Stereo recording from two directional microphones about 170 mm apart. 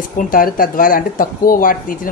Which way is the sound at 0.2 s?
55° left (ahead or behind).